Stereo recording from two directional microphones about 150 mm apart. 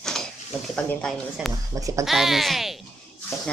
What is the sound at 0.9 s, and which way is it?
Speech, 5° left (ahead or behind).